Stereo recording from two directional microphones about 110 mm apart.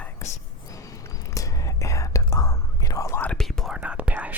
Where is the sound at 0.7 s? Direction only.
30° left (ahead or behind).